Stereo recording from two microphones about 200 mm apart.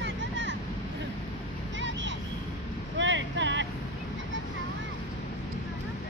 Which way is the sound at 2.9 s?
65° right (ahead or behind).